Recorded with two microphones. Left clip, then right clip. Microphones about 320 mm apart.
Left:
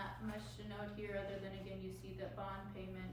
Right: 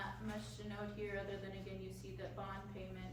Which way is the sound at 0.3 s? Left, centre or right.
Centre.